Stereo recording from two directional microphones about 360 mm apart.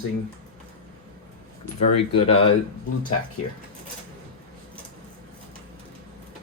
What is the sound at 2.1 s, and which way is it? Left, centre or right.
Speech, centre.